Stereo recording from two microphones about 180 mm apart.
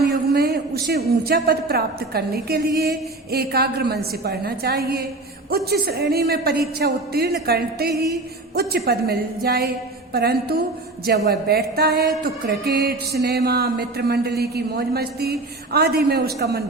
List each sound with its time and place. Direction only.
0.1 s a woman's voice: 60° right (ahead or behind)
3.3 s music: 60° right (ahead or behind)